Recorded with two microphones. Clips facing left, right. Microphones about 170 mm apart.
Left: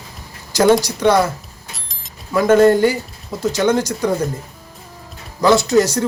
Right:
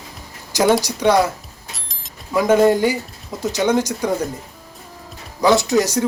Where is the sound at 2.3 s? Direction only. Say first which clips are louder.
Left 2 dB; 10° right (ahead or behind).